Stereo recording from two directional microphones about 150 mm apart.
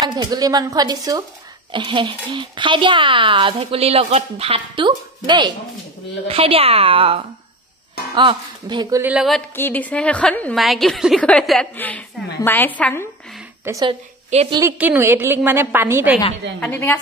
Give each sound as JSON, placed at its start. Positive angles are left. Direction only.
{"t": 0.0, "sound": "speech", "side_deg": -25}
{"t": 8.2, "sound": "speech", "side_deg": -30}
{"t": 9.0, "sound": "a woman's voice", "side_deg": -5}
{"t": 9.6, "sound": "a woman's voice", "side_deg": 10}
{"t": 13.8, "sound": "a woman's voice", "side_deg": -45}
{"t": 14.8, "sound": "a woman's voice", "side_deg": -15}
{"t": 16.5, "sound": "a woman's voice", "side_deg": 10}